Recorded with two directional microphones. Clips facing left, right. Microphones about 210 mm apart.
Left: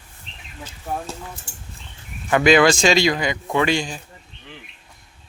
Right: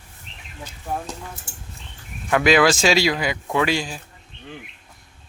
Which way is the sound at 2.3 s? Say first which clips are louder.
Left 2 dB; centre (ahead or behind).